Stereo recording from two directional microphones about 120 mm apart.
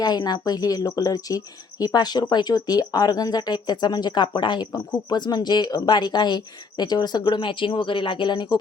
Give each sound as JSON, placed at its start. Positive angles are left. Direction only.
{"t": 0.0, "sound": "speech", "side_deg": 35}